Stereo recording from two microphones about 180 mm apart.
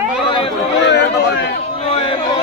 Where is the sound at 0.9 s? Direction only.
65° left (ahead or behind).